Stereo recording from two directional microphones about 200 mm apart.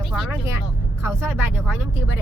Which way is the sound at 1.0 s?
10° right (ahead or behind).